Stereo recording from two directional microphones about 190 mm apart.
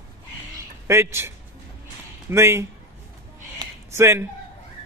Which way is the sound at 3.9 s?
15° right (ahead or behind).